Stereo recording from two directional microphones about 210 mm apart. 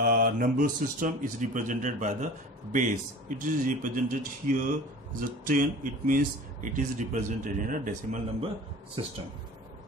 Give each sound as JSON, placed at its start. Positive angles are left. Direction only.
{"t": 0.0, "sound": "speech", "side_deg": -40}
{"t": 6.0, "sound": "speech", "side_deg": -40}
{"t": 9.0, "sound": "speech", "side_deg": -25}